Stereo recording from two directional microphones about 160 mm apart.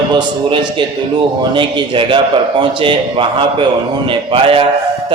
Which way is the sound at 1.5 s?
30° right (ahead or behind).